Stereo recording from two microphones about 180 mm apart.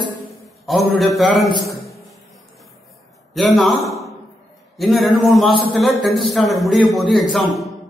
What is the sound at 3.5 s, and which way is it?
A man's voice, centre (ahead or behind).